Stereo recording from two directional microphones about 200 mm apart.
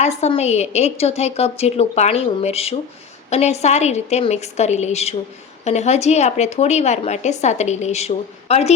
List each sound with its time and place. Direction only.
0.0 s a woman's voice: 35° left (ahead or behind)